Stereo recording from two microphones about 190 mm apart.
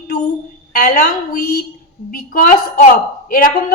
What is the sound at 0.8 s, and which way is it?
A woman's voice, 45° left (ahead or behind).